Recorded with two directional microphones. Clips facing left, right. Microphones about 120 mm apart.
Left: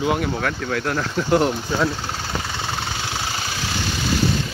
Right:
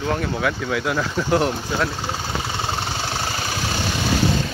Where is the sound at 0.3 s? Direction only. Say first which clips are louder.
Right 1 dB; 5° right (ahead or behind).